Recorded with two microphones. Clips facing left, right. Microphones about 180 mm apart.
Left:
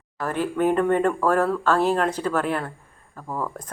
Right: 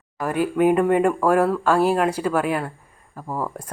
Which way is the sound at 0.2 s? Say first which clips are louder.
Right 3 dB; 10° right (ahead or behind).